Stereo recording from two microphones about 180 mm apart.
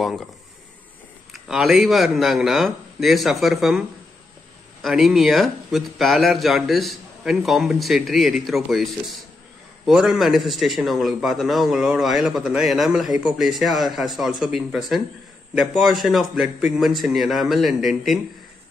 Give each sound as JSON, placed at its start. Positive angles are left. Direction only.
{"t": 1.3, "sound": "a man's voice", "side_deg": 0}
{"t": 4.8, "sound": "a man's voice", "side_deg": 0}